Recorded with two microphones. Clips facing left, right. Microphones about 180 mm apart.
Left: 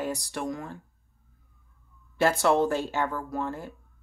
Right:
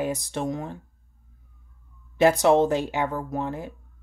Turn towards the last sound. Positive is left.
turn(degrees=-20)  # may be behind; listen again after turning